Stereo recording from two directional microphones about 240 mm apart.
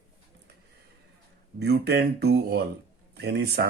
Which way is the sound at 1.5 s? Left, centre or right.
Right.